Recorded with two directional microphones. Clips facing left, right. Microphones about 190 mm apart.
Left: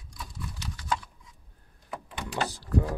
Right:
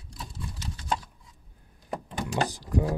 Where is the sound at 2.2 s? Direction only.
40° right (ahead or behind).